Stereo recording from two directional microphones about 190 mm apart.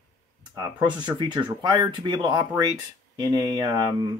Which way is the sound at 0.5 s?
20° right (ahead or behind).